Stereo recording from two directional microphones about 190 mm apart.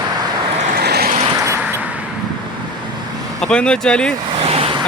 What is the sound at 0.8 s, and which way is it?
Vehicle, 55° right (ahead or behind).